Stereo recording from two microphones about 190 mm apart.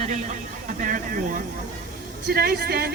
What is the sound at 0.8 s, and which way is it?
Speech, 45° right (ahead or behind).